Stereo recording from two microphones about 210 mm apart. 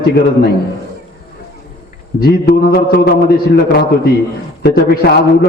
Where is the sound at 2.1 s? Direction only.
45° left (ahead or behind).